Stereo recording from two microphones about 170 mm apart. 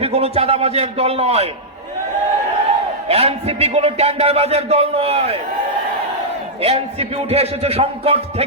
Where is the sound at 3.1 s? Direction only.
35° right (ahead or behind).